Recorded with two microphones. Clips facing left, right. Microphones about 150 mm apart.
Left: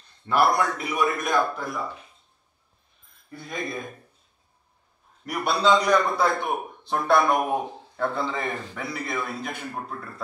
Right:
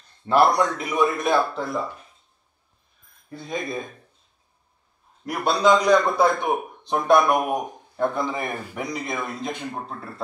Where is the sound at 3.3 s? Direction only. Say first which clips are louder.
Right 3 dB; 20° right (ahead or behind).